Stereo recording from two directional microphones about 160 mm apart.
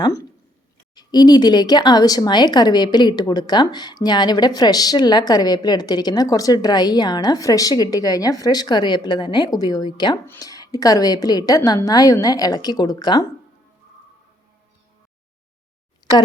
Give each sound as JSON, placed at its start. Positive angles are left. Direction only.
{"t": 0.9, "sound": "speech", "side_deg": 25}